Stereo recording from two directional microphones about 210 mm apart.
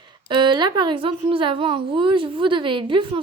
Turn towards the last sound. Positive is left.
turn(degrees=-25)  # may be behind; listen again after turning